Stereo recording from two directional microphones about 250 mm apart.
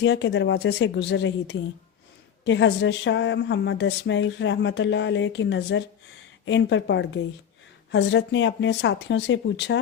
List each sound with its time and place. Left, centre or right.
0.0 s speech: left